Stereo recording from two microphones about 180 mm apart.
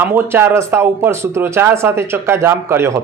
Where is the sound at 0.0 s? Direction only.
10° right (ahead or behind).